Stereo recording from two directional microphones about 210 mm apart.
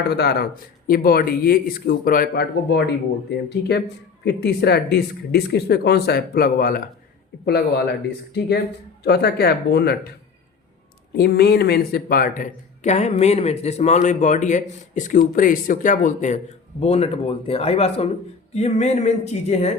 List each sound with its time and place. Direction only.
0.1 s a man's voice: 50° left (ahead or behind)
9.0 s a man's voice: 50° left (ahead or behind)
11.1 s speech: 50° left (ahead or behind); by 19.7 s 30° left (ahead or behind)